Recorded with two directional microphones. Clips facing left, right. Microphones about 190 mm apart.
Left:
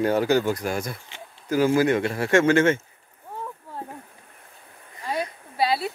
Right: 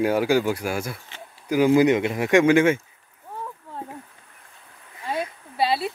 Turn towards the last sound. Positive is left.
turn(degrees=0)  # may be behind; listen again after turning